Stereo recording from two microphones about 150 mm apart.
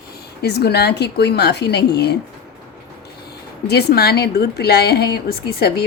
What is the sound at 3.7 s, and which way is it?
A woman's voice, 90° left.